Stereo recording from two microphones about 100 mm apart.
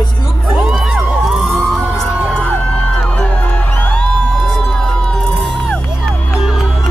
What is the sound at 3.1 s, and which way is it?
Music, 10° left (ahead or behind).